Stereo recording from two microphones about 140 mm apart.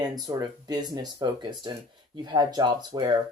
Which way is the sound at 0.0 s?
30° right (ahead or behind).